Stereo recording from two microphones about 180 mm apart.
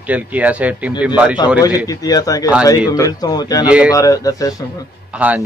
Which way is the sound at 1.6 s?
20° left (ahead or behind).